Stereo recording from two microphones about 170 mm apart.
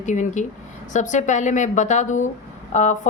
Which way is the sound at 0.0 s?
45° left (ahead or behind).